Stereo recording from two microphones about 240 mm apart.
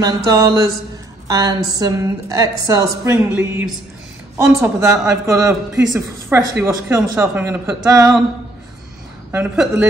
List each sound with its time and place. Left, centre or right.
0.0 s a woman's voice: centre
9.3 s a woman's voice: centre